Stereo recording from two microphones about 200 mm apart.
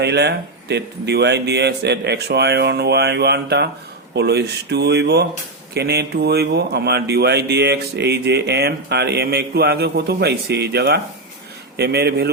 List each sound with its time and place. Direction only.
0.0 s speech: 55° right (ahead or behind)